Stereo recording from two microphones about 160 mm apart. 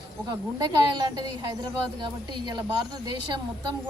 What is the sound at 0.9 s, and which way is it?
Speech, 25° right (ahead or behind).